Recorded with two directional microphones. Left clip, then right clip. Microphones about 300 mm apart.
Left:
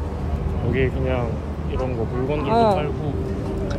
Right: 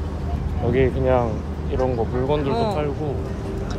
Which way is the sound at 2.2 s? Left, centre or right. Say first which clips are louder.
Right 1 dB; right.